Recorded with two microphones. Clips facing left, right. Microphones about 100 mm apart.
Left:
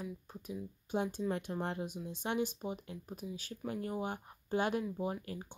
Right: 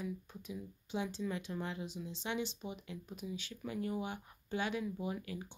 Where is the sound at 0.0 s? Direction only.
40° left (ahead or behind).